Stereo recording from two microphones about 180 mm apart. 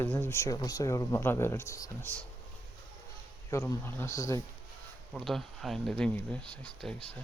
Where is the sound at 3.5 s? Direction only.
15° left (ahead or behind).